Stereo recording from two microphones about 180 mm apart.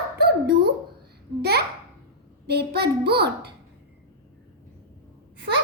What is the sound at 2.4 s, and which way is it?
Speech, 65° right (ahead or behind).